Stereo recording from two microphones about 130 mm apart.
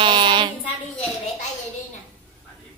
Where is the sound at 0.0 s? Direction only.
35° right (ahead or behind).